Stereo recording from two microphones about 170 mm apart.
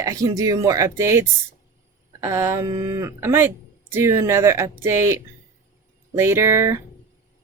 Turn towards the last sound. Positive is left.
turn(degrees=-15)  # may be behind; listen again after turning